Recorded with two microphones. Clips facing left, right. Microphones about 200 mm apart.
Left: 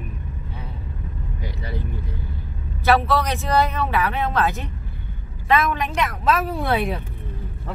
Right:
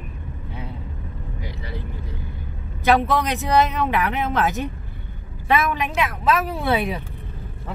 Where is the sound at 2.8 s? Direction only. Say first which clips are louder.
Even; 15° right (ahead or behind); by 7.0 s centre (ahead or behind).